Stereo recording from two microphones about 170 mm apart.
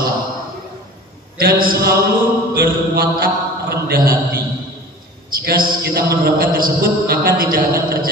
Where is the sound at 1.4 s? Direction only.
60° right (ahead or behind).